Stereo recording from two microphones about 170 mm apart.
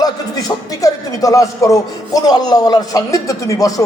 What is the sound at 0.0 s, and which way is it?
Speech, 25° left (ahead or behind).